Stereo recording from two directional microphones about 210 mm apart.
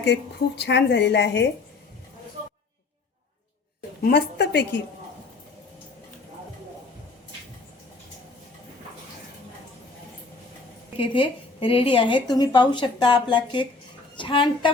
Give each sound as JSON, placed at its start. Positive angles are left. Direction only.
{"t": 0.0, "sound": "a woman's voice", "side_deg": 55}
{"t": 4.0, "sound": "a woman's voice", "side_deg": 55}
{"t": 10.9, "sound": "a woman's voice", "side_deg": 25}